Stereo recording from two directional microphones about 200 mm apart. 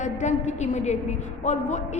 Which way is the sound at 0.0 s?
35° left (ahead or behind).